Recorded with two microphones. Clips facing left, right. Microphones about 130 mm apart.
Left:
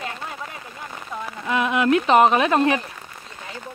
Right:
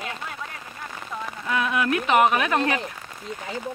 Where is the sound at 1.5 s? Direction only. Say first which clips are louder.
Left 5 dB; 20° left (ahead or behind).